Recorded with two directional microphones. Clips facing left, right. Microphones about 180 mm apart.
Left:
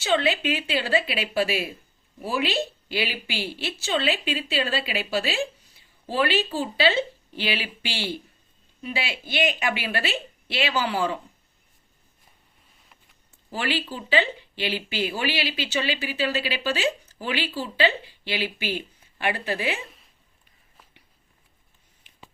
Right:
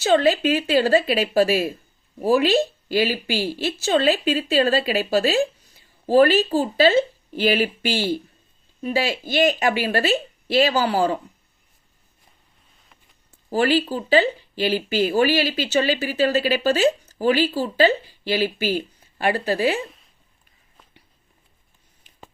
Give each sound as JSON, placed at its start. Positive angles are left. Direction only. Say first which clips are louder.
{"t": 0.0, "sound": "a woman's voice", "louder": "right 6 dB", "side_deg": -40}
{"t": 13.5, "sound": "a woman's voice", "louder": "right 9 dB", "side_deg": -40}